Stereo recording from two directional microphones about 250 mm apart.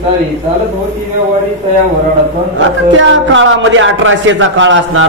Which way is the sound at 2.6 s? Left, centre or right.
Right.